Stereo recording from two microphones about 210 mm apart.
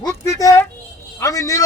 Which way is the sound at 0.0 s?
15° left (ahead or behind).